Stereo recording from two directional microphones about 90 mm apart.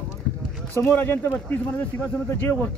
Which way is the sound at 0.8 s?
25° left (ahead or behind).